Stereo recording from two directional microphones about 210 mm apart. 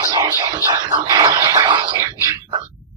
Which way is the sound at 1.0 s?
15° right (ahead or behind).